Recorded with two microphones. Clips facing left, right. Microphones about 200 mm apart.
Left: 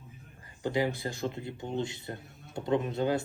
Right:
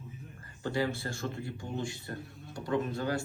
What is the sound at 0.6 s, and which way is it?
Speech, 15° left (ahead or behind).